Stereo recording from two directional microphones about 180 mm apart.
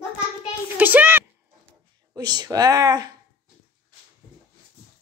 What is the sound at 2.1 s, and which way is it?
Speech, 20° right (ahead or behind).